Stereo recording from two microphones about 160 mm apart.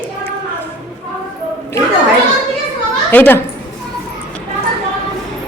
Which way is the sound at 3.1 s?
10° left (ahead or behind).